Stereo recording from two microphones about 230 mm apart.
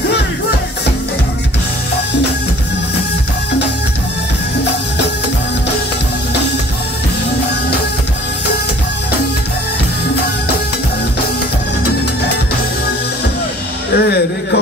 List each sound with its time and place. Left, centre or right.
13.9 s music: left